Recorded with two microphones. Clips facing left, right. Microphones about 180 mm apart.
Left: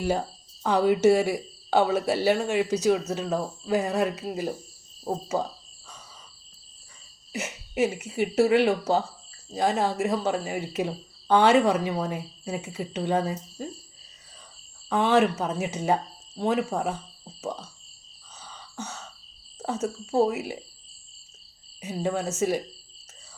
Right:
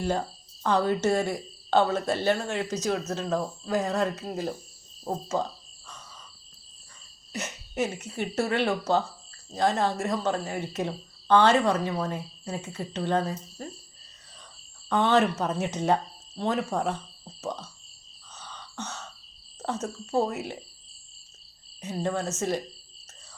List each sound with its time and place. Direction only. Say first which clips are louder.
0.6 s speech: left 4 dB; 10° left (ahead or behind)
7.3 s speech: left 3 dB; 10° left (ahead or behind)
14.8 s speech: left 1 dB; 5° left (ahead or behind)
18.3 s a sound: even; 5° left (ahead or behind)
19.5 s speech: left 3 dB; 10° left (ahead or behind)
21.8 s speech: left 1 dB; 10° left (ahead or behind)